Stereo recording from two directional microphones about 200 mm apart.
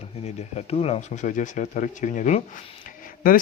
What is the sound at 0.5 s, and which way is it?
Speech, 30° left (ahead or behind).